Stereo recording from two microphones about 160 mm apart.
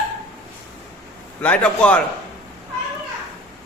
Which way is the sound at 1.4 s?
10° left (ahead or behind).